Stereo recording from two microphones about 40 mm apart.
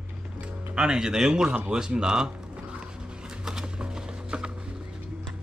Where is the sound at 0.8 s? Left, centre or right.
Centre.